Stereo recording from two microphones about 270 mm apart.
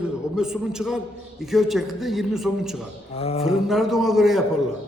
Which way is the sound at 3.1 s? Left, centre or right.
Left.